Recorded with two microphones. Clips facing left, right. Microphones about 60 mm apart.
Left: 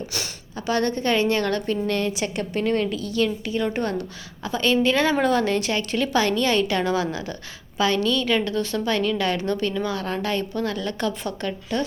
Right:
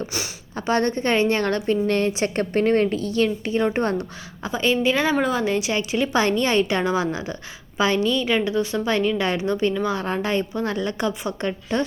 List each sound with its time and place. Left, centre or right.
0.5 s a woman's voice: right